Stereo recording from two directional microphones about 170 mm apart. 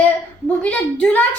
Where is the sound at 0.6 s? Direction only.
10° left (ahead or behind).